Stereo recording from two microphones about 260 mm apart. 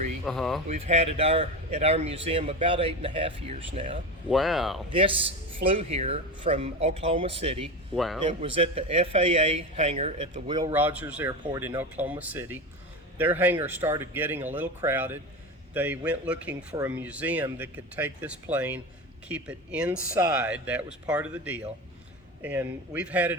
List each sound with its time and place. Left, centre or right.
0.3 s speech: centre
0.7 s speech: right
4.3 s speech: centre
4.9 s speech: centre
7.9 s speech: centre
8.2 s speech: centre